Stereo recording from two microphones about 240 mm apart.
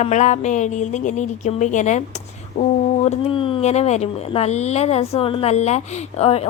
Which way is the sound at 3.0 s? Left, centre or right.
Left.